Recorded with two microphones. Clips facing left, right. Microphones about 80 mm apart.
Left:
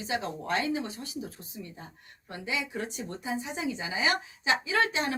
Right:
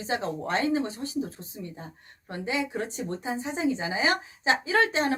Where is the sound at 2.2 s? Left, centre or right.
Right.